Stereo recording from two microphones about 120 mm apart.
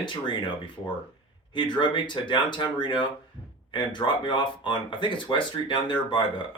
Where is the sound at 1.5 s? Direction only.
40° left (ahead or behind).